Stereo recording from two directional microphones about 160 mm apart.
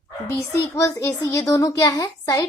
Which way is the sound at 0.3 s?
15° left (ahead or behind).